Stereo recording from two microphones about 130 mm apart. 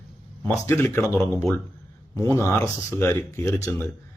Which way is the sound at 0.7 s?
20° left (ahead or behind).